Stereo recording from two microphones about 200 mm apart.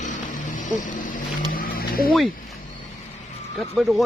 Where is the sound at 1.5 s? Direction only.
45° left (ahead or behind).